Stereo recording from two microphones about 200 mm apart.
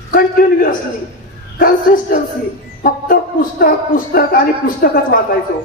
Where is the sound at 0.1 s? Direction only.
45° left (ahead or behind).